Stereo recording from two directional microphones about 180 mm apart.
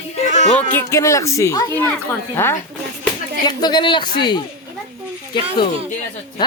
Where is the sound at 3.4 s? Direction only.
25° left (ahead or behind).